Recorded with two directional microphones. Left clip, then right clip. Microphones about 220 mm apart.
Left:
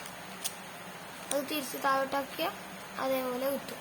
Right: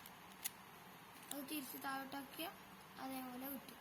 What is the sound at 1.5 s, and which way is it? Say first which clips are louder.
Speech: left 16 dB; 20° left (ahead or behind).